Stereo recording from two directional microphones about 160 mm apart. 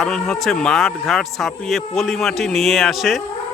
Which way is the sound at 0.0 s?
Centre (ahead or behind).